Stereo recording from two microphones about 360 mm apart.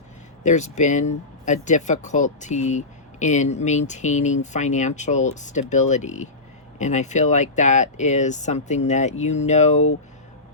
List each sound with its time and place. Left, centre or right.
0.4 s speech: centre